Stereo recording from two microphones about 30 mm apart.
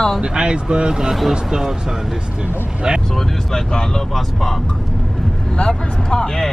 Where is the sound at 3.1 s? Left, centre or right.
Centre.